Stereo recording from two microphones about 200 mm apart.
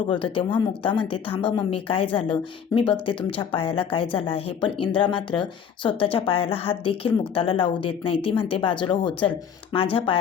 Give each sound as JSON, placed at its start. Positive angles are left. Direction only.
{"t": 0.1, "sound": "a woman's voice", "side_deg": 25}